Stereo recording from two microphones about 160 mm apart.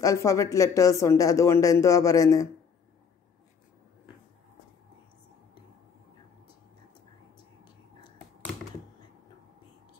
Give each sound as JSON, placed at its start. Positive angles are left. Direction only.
{"t": 0.0, "sound": "speech", "side_deg": 20}